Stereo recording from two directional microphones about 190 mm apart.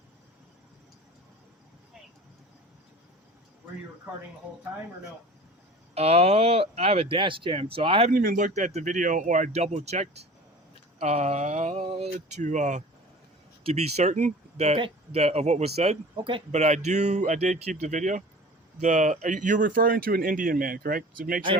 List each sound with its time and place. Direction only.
5.9 s speech: 35° right (ahead or behind)
8.1 s speech: 45° right (ahead or behind)